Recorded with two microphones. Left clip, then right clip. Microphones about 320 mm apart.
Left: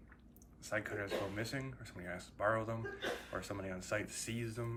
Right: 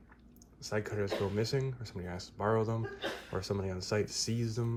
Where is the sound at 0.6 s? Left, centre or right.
Centre.